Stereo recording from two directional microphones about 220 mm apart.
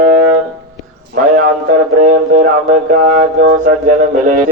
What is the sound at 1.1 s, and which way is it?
Mantra, 40° right (ahead or behind).